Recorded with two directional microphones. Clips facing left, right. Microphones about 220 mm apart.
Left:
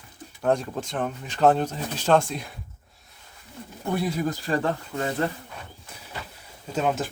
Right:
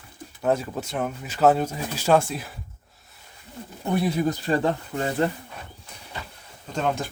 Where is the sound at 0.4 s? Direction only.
5° right (ahead or behind).